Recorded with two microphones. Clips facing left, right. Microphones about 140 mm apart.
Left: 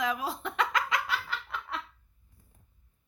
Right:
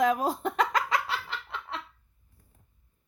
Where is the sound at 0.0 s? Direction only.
45° right (ahead or behind); by 1.8 s 30° right (ahead or behind).